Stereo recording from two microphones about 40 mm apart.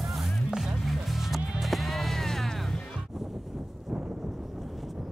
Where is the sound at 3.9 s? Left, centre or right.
Centre.